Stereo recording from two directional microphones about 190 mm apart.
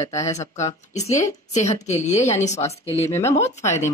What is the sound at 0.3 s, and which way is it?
Speech, 35° left (ahead or behind).